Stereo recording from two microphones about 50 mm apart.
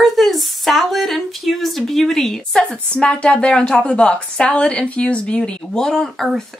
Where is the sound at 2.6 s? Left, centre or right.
Left.